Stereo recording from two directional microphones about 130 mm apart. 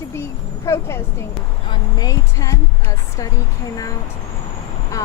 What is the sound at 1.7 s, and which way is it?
Speech, 30° left (ahead or behind).